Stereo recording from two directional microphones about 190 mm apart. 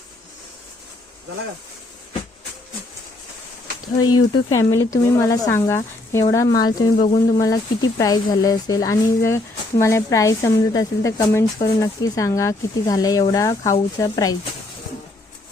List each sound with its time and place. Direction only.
4.0 s speech: 15° left (ahead or behind)